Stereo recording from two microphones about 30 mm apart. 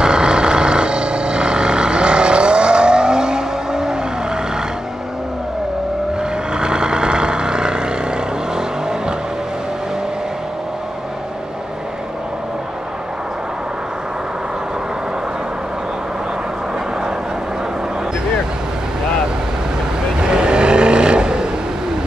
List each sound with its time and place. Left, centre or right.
0.0 s vehicle: right
6.5 s vehicle: right
20.2 s vehicle: right